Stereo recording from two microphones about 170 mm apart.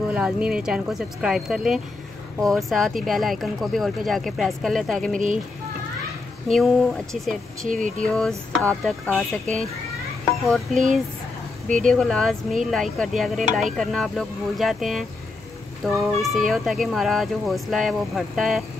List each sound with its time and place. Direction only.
0.1 s speech: 5° right (ahead or behind)
5.1 s speech: 50° right (ahead or behind)
6.5 s speech: centre (ahead or behind)
7.6 s speech: 50° right (ahead or behind)
8.0 s speech: 5° left (ahead or behind)
11.9 s speech: centre (ahead or behind)